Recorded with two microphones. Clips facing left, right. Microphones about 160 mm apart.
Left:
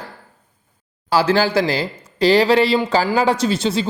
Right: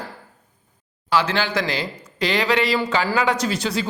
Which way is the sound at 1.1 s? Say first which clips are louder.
Left 5 dB; 35° left (ahead or behind).